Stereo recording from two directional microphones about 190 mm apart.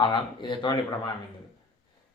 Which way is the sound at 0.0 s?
25° left (ahead or behind).